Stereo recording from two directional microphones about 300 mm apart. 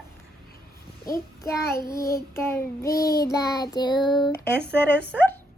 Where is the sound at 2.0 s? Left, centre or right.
Left.